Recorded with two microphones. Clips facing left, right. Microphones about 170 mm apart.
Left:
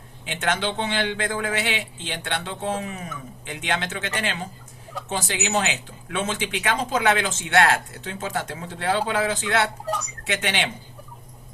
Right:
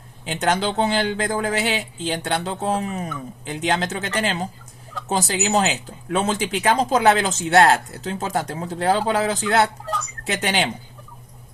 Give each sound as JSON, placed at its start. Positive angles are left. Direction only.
{"t": 0.3, "sound": "speech", "side_deg": -40}
{"t": 9.8, "sound": "speech", "side_deg": 15}
{"t": 10.2, "sound": "speech", "side_deg": -40}